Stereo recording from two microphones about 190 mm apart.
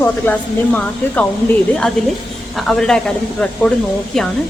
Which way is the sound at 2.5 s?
Centre (ahead or behind).